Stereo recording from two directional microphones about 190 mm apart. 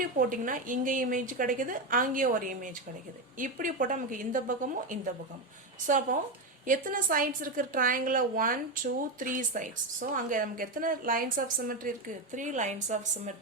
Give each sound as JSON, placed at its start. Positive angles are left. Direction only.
{"t": 0.0, "sound": "a woman's voice", "side_deg": -45}